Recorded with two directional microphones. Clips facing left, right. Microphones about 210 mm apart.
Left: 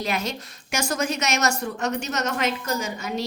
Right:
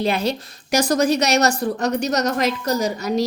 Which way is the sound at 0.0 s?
30° right (ahead or behind).